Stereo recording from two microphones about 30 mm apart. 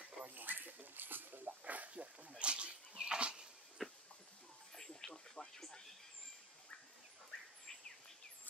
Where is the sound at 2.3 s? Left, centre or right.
Right.